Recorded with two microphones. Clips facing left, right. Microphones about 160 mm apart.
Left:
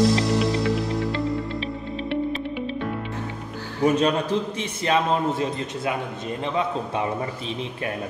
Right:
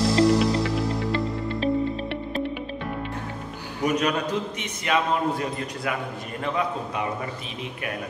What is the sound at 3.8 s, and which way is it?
A man's voice, 30° left (ahead or behind).